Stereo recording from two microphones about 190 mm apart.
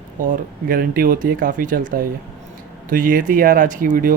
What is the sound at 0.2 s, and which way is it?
Speech, 45° right (ahead or behind).